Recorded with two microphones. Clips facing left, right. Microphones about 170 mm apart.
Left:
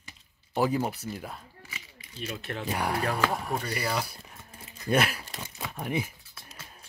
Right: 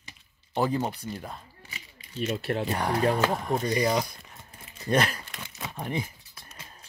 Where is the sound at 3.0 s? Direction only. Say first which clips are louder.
Right 7 dB; 30° right (ahead or behind).